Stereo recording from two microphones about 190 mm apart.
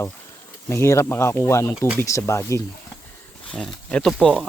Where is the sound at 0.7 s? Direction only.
15° left (ahead or behind).